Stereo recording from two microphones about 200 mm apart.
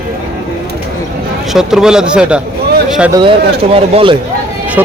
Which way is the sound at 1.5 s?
5° right (ahead or behind).